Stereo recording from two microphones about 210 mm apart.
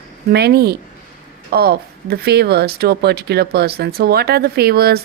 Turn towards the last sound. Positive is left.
turn(degrees=-50)  # may be behind; listen again after turning